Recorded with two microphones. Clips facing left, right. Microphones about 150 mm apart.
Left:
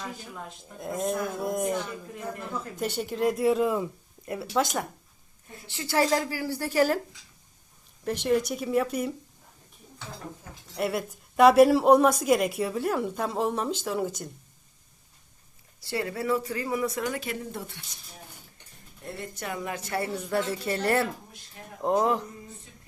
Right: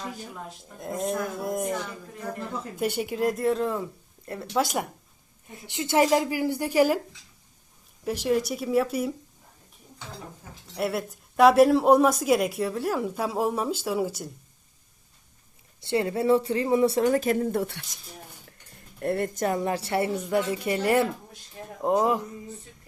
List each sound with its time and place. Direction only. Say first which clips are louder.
0.8 s speech: even; centre (ahead or behind)
2.7 s a woman's voice: right 3 dB; 10° right (ahead or behind)
3.2 s speech: left 2 dB; centre (ahead or behind)
4.5 s a woman's voice: right 1 dB; 10° right (ahead or behind)
8.0 s speech: even; 5° right (ahead or behind)
10.8 s speech: right 1 dB; centre (ahead or behind)
15.8 s speech: right 6 dB; 25° right (ahead or behind); by 19.5 s 45° right (ahead or behind)
19.5 s a woman's voice: right 5 dB; 30° right (ahead or behind)
20.3 s a woman's voice: right 1 dB; 15° right (ahead or behind)